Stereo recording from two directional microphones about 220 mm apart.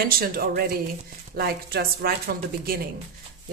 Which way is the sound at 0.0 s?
40° right (ahead or behind).